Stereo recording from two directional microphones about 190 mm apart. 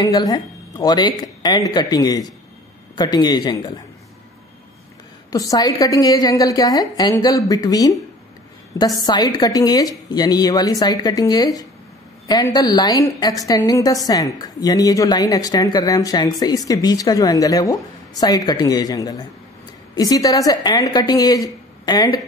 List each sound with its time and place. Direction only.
0.0 s a woman's voice: 20° left (ahead or behind)
5.3 s a woman's voice: 20° left (ahead or behind)